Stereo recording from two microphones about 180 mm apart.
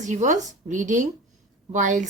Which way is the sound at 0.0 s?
45° right (ahead or behind).